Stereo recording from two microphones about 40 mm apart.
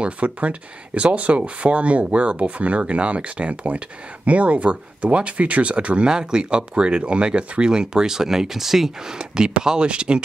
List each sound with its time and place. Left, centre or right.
0.0 s speech: right
6.0 s speech: right